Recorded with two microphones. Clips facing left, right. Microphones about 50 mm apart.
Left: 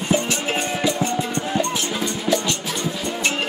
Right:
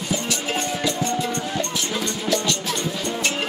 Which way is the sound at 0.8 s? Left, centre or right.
Centre.